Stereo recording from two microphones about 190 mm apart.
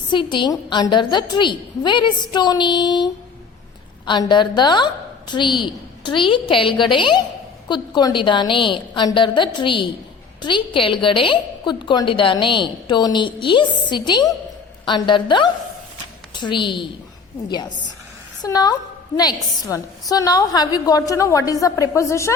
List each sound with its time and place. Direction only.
0.1 s a woman's voice: 25° left (ahead or behind)